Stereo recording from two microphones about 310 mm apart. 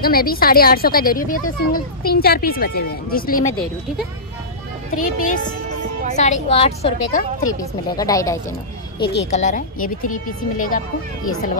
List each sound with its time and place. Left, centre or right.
0.0 s speech: left
4.9 s speech: left
7.9 s speech: centre
9.0 s speech: left
9.3 s speech: left